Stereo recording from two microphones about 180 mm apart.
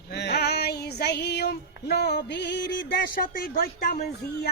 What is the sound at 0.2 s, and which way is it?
Female singing, 65° left (ahead or behind).